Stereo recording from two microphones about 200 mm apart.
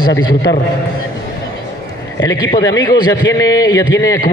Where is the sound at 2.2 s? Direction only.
20° left (ahead or behind).